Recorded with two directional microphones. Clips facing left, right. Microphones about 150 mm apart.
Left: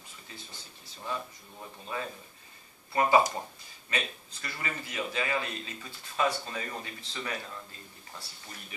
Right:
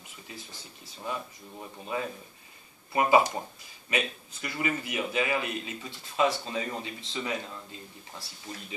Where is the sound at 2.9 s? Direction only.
20° right (ahead or behind).